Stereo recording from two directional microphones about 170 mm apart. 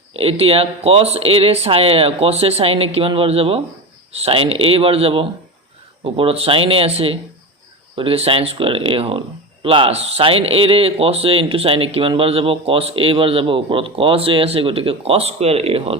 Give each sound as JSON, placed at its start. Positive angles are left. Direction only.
{"t": 0.2, "sound": "speech", "side_deg": -35}